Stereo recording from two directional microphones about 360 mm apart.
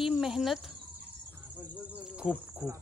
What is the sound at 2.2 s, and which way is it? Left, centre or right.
Insect, centre.